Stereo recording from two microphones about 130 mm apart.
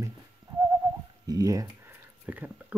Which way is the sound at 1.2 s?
25° right (ahead or behind).